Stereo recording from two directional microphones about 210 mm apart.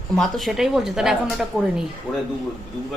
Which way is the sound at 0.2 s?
Centre (ahead or behind).